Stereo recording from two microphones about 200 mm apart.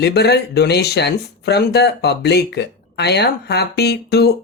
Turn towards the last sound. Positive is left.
turn(degrees=55)  # may be behind; listen again after turning